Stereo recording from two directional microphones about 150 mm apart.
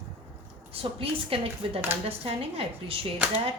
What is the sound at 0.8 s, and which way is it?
Speech, 40° right (ahead or behind).